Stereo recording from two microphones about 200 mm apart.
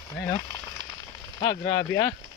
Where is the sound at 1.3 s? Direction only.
20° left (ahead or behind).